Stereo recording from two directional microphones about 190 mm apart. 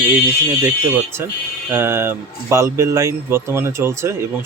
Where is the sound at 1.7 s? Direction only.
10° right (ahead or behind).